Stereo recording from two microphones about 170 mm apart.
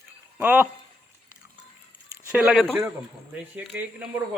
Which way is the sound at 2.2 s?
15° right (ahead or behind).